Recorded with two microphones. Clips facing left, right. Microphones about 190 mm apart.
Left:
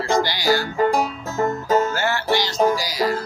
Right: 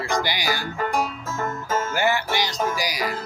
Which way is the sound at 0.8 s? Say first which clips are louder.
Left 6 dB; 35° left (ahead or behind).